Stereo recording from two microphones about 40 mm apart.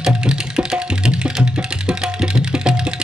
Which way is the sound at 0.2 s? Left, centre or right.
Right.